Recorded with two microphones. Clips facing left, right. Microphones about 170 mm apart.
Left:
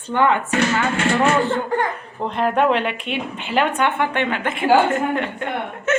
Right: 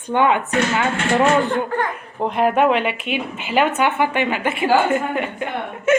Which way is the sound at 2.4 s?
5° right (ahead or behind).